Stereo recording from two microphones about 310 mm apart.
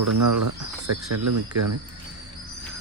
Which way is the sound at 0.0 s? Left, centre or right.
Right.